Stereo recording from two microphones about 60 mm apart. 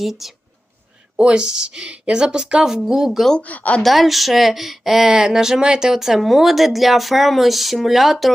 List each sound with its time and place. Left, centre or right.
0.0 s speech: centre
1.1 s a woman's voice: centre
3.4 s speech: left
3.8 s speech: centre